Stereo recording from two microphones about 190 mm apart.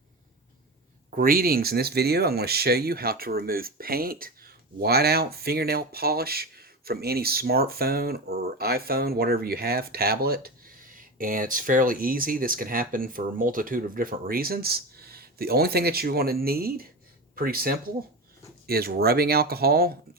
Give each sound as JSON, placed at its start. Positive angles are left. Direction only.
{"t": 1.1, "sound": "speech", "side_deg": -50}